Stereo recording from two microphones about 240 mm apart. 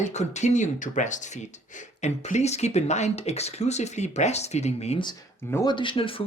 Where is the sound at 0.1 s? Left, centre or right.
Left.